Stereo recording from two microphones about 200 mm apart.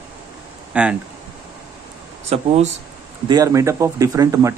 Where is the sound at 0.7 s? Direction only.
5° right (ahead or behind).